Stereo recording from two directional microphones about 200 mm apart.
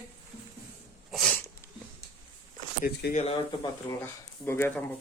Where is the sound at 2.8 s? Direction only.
50° left (ahead or behind).